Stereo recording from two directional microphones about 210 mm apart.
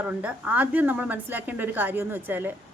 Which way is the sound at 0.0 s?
5° right (ahead or behind).